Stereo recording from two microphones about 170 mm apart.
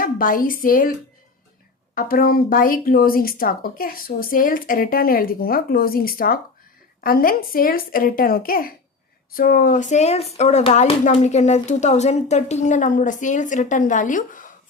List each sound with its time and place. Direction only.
0.0 s a woman's voice: 55° left (ahead or behind)
2.0 s speech: 55° left (ahead or behind)